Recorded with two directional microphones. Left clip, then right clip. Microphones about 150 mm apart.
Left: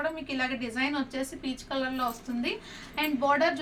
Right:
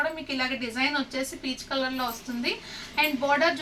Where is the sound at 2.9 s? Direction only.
15° left (ahead or behind).